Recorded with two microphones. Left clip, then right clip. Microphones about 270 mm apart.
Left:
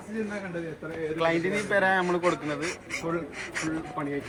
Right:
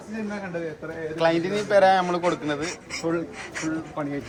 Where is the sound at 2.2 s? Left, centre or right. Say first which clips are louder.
Right 2 dB; centre.